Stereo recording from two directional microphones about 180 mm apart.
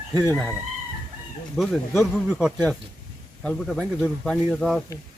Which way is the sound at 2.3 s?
5° right (ahead or behind).